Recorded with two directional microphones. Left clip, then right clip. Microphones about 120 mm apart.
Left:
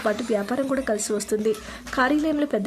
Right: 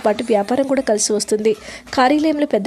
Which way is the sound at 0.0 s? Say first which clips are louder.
Right 8 dB; 40° right (ahead or behind).